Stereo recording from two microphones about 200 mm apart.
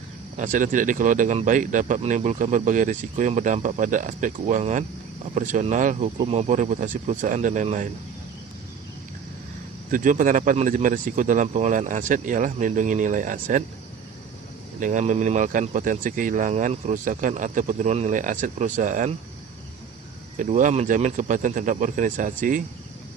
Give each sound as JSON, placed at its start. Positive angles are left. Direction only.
{"t": 0.3, "sound": "speech", "side_deg": -40}
{"t": 9.9, "sound": "speech", "side_deg": -40}
{"t": 14.8, "sound": "speech", "side_deg": -40}
{"t": 20.3, "sound": "speech", "side_deg": -40}